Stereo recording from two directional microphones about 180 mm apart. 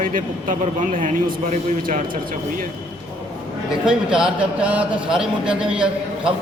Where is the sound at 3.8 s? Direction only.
5° right (ahead or behind).